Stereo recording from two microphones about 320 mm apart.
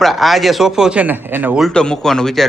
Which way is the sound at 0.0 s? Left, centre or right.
Centre.